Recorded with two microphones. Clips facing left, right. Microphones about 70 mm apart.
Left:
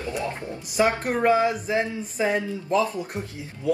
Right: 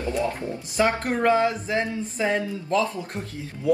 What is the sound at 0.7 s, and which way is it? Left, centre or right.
Speech, centre.